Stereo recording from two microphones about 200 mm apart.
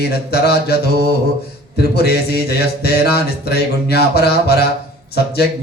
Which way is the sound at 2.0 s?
55° left (ahead or behind).